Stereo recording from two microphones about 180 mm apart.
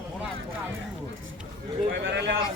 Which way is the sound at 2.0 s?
75° right (ahead or behind).